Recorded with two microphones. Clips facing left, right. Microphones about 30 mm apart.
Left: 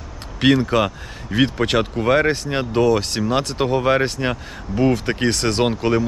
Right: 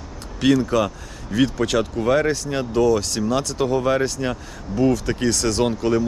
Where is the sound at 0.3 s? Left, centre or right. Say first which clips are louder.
Left 2 dB; left.